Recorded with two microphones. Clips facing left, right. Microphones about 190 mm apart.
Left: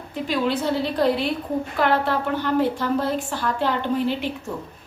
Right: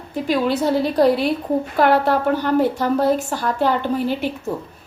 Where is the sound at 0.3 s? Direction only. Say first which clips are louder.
Right 4 dB; 40° right (ahead or behind).